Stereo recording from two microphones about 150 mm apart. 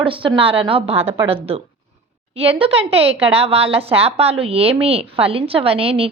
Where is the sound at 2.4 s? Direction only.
40° right (ahead or behind).